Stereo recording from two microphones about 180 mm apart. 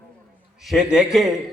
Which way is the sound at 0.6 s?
5° right (ahead or behind).